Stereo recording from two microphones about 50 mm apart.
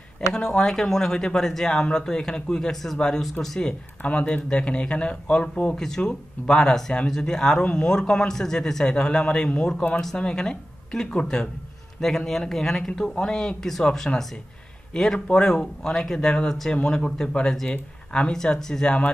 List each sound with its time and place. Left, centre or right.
0.3 s speech: centre